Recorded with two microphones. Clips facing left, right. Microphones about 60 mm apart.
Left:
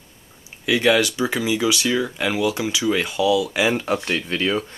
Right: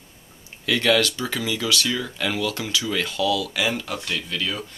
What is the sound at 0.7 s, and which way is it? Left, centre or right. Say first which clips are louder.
Speech: left 2 dB; centre.